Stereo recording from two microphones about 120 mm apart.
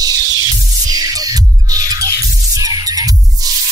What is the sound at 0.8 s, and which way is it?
Music, 30° right (ahead or behind).